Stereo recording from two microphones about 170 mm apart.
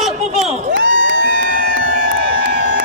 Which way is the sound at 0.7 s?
90° right.